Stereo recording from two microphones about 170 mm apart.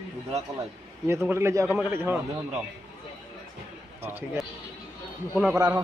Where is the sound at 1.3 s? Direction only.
15° right (ahead or behind).